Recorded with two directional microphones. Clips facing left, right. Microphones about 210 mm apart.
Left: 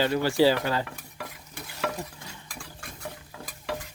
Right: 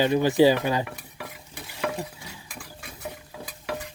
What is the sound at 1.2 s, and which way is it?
Stir, 5° right (ahead or behind).